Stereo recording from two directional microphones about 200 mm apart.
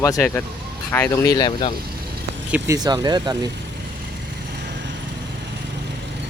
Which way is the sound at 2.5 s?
15° right (ahead or behind).